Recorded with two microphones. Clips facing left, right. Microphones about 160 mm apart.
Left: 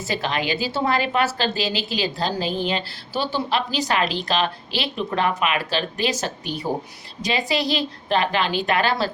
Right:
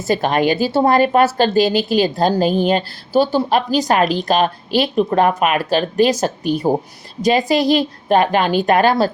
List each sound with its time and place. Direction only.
0.1 s speech: 50° right (ahead or behind)